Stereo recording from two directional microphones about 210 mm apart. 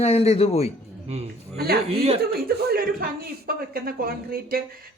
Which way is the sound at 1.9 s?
30° right (ahead or behind).